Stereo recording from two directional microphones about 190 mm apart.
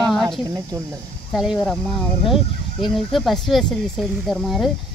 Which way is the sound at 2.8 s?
Centre (ahead or behind).